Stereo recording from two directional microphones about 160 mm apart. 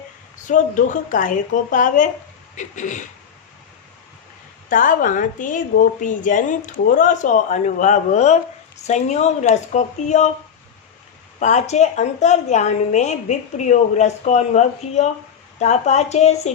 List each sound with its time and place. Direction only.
0.4 s a woman's voice: 55° left (ahead or behind)
4.7 s a woman's voice: 55° left (ahead or behind)
11.3 s a woman's voice: 45° left (ahead or behind)